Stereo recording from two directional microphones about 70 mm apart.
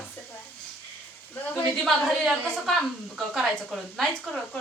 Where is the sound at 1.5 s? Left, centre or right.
Centre.